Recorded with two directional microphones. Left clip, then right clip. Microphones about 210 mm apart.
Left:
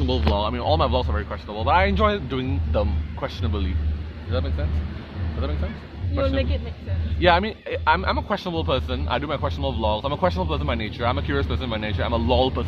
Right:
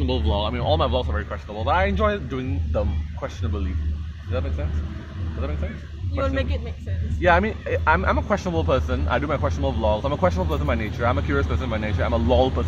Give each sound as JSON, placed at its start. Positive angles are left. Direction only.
{"t": 0.0, "sound": "a sound", "side_deg": 5}
{"t": 0.4, "sound": "speech", "side_deg": -5}
{"t": 6.2, "sound": "a man's voice", "side_deg": -45}
{"t": 7.2, "sound": "speech", "side_deg": 15}